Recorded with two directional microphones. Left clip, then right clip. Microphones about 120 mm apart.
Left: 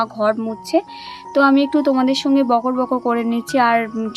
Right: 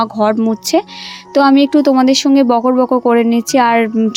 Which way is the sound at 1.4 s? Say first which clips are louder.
Right 5 dB; 45° right (ahead or behind).